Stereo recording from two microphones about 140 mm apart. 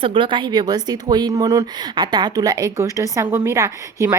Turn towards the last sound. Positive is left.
turn(degrees=-20)  # may be behind; listen again after turning